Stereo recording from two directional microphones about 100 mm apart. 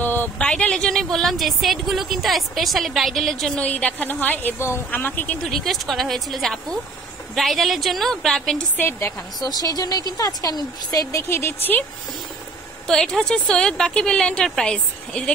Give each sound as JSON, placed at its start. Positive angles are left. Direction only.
{"t": 0.0, "sound": "a sound", "side_deg": 20}
{"t": 0.4, "sound": "a woman's voice", "side_deg": 10}
{"t": 8.7, "sound": "a woman's voice", "side_deg": 20}
{"t": 9.4, "sound": "speech", "side_deg": 40}
{"t": 12.8, "sound": "a woman's voice", "side_deg": 5}